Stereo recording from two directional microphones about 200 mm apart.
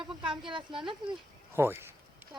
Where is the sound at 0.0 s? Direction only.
25° right (ahead or behind).